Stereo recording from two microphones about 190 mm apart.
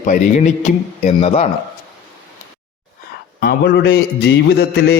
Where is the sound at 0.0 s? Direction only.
40° left (ahead or behind).